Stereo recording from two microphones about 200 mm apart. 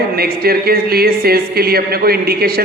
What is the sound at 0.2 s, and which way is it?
A man's voice, 50° right (ahead or behind).